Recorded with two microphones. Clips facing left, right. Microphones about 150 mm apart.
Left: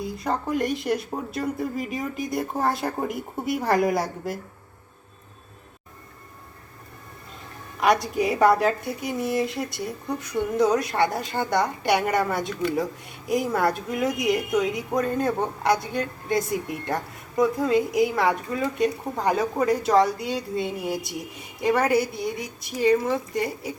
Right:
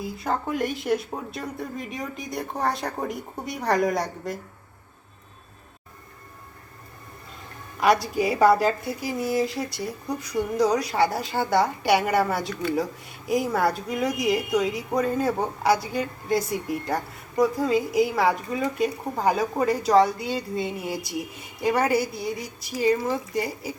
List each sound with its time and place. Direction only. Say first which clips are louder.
0.0 s speech: even; centre (ahead or behind)
7.8 s speech: even; centre (ahead or behind)